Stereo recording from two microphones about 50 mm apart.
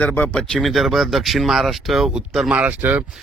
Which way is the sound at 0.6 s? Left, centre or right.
Centre.